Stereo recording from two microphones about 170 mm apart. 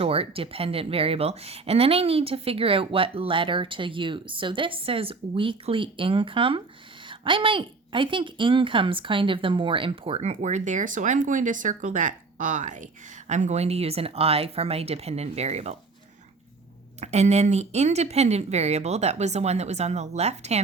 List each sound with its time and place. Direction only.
0.0 s a woman's voice: 35° right (ahead or behind)
17.0 s a woman's voice: 40° right (ahead or behind)